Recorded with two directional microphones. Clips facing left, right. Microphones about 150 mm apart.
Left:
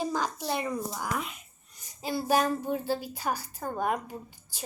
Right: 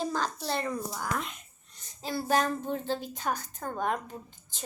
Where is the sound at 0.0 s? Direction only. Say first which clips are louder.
Left 1 dB; 10° left (ahead or behind).